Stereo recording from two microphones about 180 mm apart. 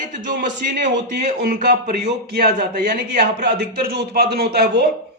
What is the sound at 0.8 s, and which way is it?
A man's voice, 70° right (ahead or behind).